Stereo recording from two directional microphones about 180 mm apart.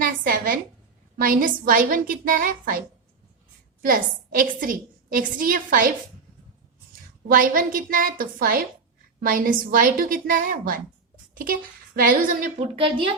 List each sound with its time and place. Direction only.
0.0 s a sound: 50° right (ahead or behind)
1.2 s a woman's voice: 50° right (ahead or behind)
3.8 s a woman's voice: 50° right (ahead or behind)
7.3 s a woman's voice: 50° right (ahead or behind)
11.9 s a woman's voice: 50° right (ahead or behind)
12.7 s speech: 30° right (ahead or behind)